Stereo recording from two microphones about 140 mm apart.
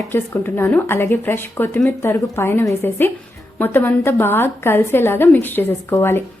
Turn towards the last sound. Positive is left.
turn(degrees=15)  # may be behind; listen again after turning